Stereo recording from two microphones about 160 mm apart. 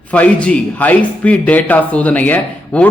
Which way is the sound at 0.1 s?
10° left (ahead or behind).